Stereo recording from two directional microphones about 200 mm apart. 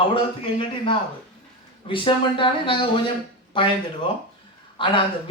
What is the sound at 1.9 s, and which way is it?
A man's voice, 25° left (ahead or behind).